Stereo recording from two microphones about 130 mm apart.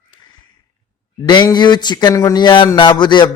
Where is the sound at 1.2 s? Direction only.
35° left (ahead or behind).